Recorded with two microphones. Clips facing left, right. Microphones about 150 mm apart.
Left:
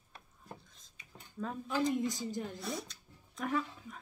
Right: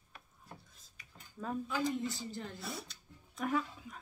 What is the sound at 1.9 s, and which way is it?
Speech, 15° left (ahead or behind).